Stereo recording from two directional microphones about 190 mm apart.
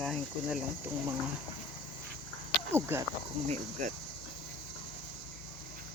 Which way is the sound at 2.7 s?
10° right (ahead or behind).